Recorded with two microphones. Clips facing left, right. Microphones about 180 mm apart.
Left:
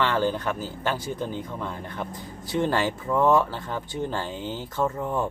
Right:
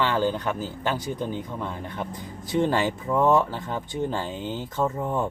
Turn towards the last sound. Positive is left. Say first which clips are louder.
# even
turn(degrees=-15)  # may be behind; listen again after turning